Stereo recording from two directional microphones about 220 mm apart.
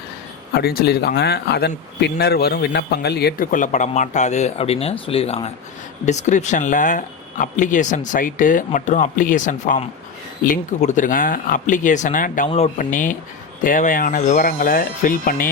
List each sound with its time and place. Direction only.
0.6 s speech: 45° left (ahead or behind)